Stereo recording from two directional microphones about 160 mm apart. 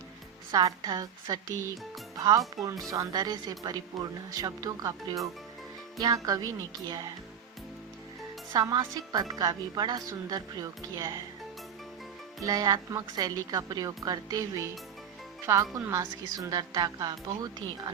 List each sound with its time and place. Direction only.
0.5 s a woman's voice: 20° right (ahead or behind)
8.5 s a woman's voice: 25° right (ahead or behind)
12.4 s a woman's voice: 20° right (ahead or behind)